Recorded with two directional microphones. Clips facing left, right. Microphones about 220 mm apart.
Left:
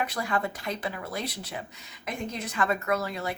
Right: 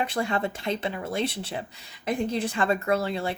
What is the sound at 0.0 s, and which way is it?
A woman's voice, 25° right (ahead or behind).